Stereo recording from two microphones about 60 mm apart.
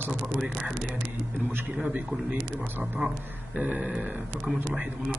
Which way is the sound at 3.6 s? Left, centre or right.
Right.